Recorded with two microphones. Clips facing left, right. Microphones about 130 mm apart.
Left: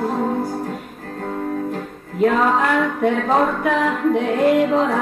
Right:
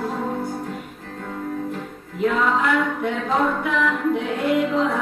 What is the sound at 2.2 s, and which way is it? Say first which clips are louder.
Music: left 4 dB; 55° left (ahead or behind).